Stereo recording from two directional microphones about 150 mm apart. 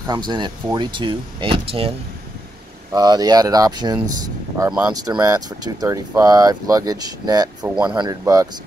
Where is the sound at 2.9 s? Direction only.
25° right (ahead or behind).